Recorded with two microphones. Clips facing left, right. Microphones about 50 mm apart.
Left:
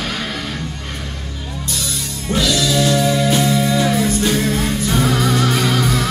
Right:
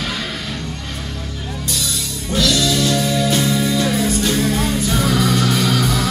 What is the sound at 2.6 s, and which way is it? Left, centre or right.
Music, centre.